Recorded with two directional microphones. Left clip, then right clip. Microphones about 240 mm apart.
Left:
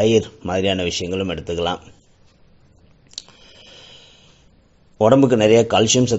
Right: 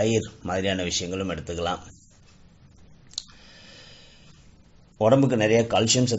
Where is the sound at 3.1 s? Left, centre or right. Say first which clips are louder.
Left 1 dB; left.